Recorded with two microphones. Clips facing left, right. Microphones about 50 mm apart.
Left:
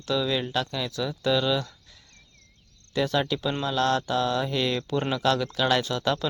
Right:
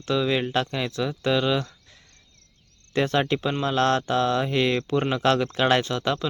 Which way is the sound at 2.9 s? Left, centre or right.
Right.